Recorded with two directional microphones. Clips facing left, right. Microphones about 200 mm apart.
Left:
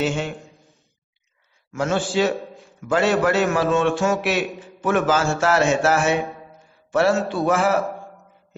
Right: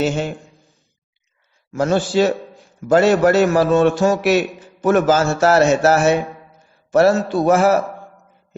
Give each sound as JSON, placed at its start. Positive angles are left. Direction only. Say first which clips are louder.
{"t": 0.0, "sound": "a man's voice", "louder": "right 4 dB", "side_deg": -40}
{"t": 1.7, "sound": "a man's voice", "louder": "right 5 dB", "side_deg": -40}